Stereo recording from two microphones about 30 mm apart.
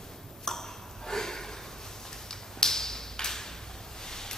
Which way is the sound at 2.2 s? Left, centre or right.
Centre.